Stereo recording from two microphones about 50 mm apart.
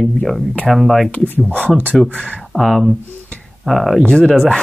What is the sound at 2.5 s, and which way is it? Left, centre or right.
Speech, centre.